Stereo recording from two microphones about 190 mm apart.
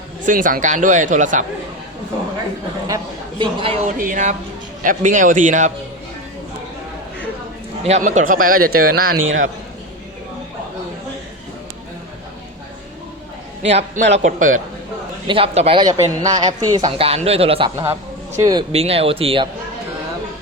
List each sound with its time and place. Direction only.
0.3 s speech: 45° right (ahead or behind)
2.8 s a man's voice: 20° right (ahead or behind)
3.8 s speech: 45° right (ahead or behind)
7.9 s speech: 40° right (ahead or behind)
9.1 s a man's voice: 90° right
13.6 s speech: 35° right (ahead or behind)
15.3 s a man's voice: 30° right (ahead or behind)
18.7 s speech: 30° right (ahead or behind)